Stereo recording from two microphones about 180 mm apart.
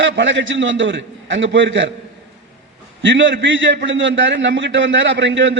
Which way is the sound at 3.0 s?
90° right.